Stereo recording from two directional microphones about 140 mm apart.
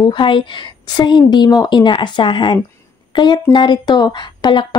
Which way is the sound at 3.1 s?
35° left (ahead or behind).